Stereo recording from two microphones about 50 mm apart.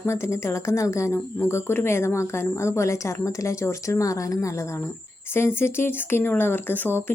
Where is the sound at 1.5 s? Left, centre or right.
Left.